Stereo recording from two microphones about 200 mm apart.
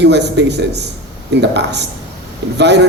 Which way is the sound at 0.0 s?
60° right (ahead or behind).